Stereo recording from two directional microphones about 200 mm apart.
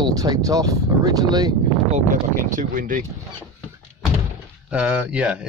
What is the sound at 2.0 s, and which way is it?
Speech, 40° right (ahead or behind).